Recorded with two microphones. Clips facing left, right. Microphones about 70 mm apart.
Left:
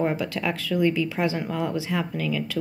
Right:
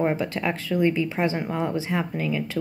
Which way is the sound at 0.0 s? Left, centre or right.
Right.